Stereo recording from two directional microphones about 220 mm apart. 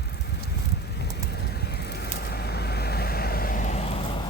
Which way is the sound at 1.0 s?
50° left (ahead or behind).